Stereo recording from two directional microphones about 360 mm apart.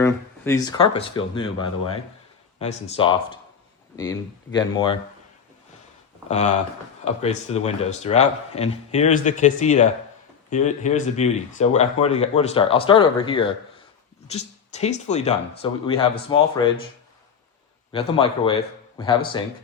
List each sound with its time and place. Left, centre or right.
0.0 s speech: centre
6.2 s speech: centre
17.9 s speech: centre